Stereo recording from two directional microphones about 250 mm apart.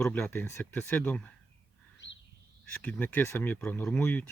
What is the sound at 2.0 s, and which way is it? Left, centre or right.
Bird, left.